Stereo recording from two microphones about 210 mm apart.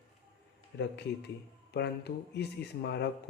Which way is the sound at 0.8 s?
50° left (ahead or behind).